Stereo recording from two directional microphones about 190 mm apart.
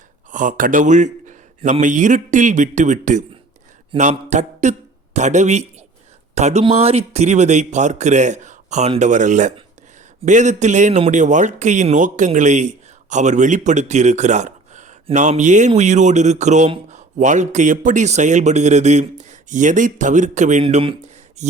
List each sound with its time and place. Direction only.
0.3 s a man's voice: 45° right (ahead or behind)
4.1 s a sound: 40° right (ahead or behind)
5.1 s a man's voice: 40° right (ahead or behind)